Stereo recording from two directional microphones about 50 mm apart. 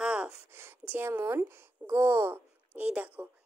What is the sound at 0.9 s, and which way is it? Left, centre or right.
Speech, right.